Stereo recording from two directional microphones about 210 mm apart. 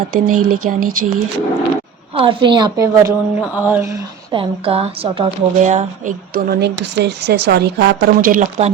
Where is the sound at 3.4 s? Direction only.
5° right (ahead or behind); by 8.7 s 30° right (ahead or behind).